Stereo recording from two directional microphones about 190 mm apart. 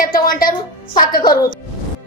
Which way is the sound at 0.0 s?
50° left (ahead or behind).